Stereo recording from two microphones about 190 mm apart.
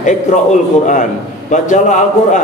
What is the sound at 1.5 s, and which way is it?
Speech, 40° left (ahead or behind).